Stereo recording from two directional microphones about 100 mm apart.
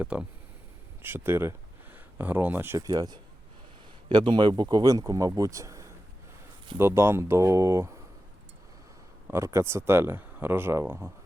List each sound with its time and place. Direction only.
0.0 s speech: 15° right (ahead or behind)
2.8 s speech: 40° right (ahead or behind)
4.1 s speech: 50° right (ahead or behind); by 7.9 s 30° right (ahead or behind)
9.2 s speech: 25° right (ahead or behind)